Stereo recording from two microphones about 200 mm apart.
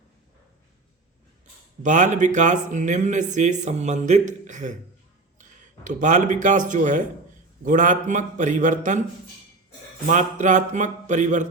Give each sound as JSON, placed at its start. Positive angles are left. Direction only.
{"t": 1.8, "sound": "speech", "side_deg": -40}
{"t": 10.1, "sound": "speech", "side_deg": -40}